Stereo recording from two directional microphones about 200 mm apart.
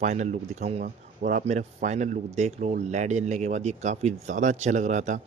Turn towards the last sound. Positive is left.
turn(degrees=-35)  # may be behind; listen again after turning